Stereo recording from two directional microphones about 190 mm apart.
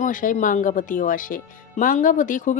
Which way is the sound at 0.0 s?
45° left (ahead or behind).